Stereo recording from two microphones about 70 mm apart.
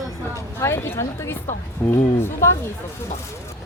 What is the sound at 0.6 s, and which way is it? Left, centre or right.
Speech, left.